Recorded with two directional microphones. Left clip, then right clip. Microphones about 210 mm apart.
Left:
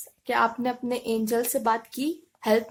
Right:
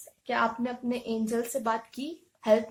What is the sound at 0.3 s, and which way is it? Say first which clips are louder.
A woman's voice: left 4 dB; 50° left (ahead or behind).